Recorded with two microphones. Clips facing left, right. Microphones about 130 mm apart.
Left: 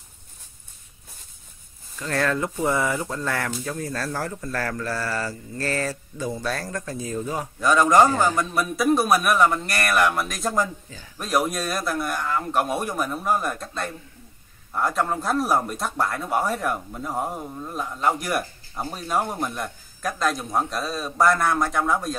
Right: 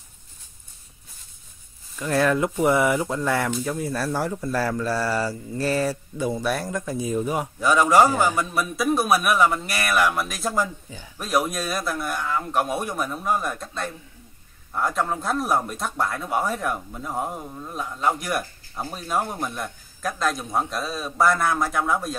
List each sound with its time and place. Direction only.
2.0 s speech: 15° right (ahead or behind)